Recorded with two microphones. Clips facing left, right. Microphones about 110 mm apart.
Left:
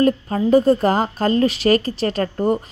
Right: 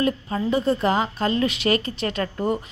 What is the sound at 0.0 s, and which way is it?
A woman's voice, 45° left (ahead or behind).